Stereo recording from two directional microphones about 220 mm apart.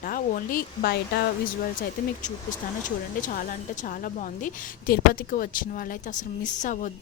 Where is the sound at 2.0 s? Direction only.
40° left (ahead or behind).